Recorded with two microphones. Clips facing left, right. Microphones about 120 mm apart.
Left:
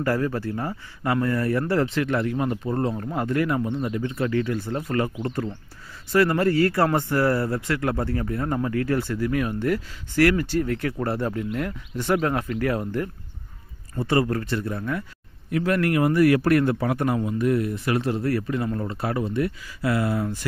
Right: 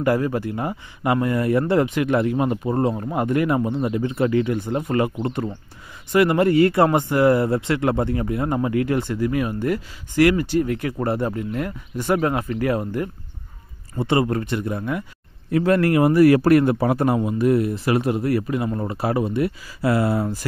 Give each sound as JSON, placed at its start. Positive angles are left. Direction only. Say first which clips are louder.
{"t": 0.0, "sound": "a man's voice", "louder": "right 4 dB", "side_deg": -15}
{"t": 15.5, "sound": "a man's voice", "louder": "right 4 dB", "side_deg": -30}